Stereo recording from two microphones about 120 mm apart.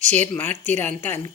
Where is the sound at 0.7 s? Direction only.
20° left (ahead or behind).